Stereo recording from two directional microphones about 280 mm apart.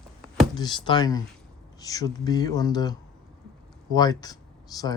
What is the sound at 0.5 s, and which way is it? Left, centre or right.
Speech, centre.